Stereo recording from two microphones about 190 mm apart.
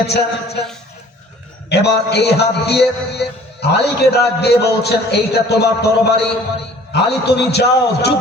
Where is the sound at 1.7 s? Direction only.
60° left (ahead or behind).